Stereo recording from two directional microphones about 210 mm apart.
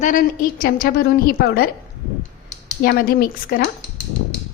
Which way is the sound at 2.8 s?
45° left (ahead or behind).